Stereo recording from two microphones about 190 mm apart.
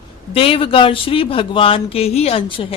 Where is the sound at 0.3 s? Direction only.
30° left (ahead or behind).